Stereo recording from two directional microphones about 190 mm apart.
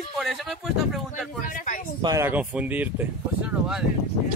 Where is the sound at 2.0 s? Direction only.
20° right (ahead or behind).